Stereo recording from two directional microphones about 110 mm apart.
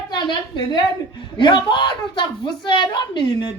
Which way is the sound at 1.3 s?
45° left (ahead or behind).